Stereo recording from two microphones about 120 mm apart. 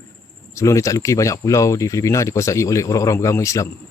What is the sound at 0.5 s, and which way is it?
Speech, 25° left (ahead or behind).